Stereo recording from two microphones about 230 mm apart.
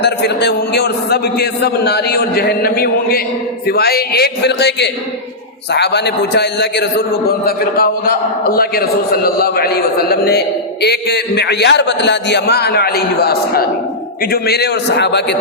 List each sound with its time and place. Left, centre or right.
0.0 s a man's voice: left